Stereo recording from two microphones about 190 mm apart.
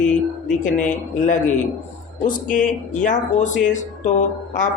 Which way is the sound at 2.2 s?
45° left (ahead or behind).